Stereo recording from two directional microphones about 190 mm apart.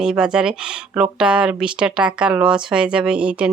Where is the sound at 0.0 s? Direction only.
5° right (ahead or behind).